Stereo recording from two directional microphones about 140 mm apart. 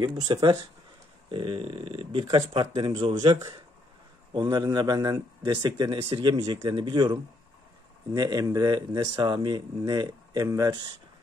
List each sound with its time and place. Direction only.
0.0 s a man's voice: 30° right (ahead or behind)